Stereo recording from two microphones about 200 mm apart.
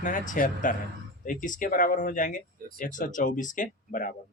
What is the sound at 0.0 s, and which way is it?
Speech, 40° left (ahead or behind).